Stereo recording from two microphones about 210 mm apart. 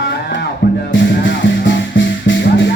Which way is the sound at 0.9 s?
60° left (ahead or behind).